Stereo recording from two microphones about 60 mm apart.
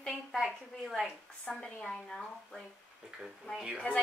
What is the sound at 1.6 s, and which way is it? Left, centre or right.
Speech, centre.